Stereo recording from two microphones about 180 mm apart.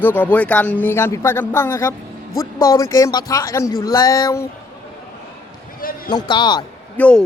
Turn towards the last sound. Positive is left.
turn(degrees=5)  # may be behind; listen again after turning